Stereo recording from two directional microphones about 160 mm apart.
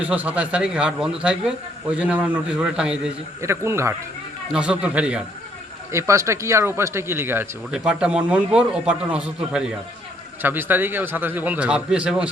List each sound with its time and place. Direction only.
0.0 s speech: 10° right (ahead or behind)
3.4 s speech: 15° right (ahead or behind)
4.5 s speech: 5° right (ahead or behind)
5.9 s speech: 20° right (ahead or behind)